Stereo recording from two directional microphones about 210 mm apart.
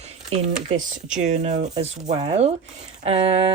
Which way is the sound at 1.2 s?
35° right (ahead or behind).